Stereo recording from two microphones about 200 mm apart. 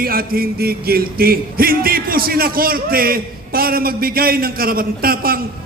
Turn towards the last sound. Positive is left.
turn(degrees=-50)  # may be behind; listen again after turning